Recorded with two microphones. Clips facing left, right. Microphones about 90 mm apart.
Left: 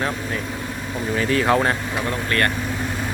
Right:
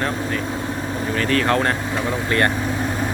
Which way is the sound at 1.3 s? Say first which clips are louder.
Left 1 dB; 10° left (ahead or behind).